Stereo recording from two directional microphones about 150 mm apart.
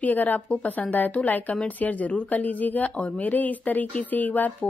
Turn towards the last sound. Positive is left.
turn(degrees=10)  # may be behind; listen again after turning